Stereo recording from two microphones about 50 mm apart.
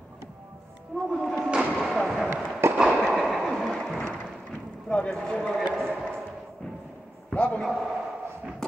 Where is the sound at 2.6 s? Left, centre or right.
Right.